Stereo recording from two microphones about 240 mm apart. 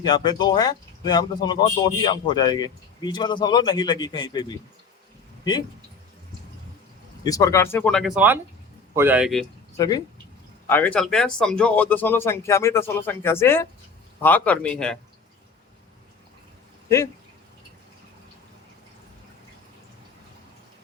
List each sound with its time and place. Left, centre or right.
0.0 s speech: centre
7.3 s speech: centre
9.7 s speech: centre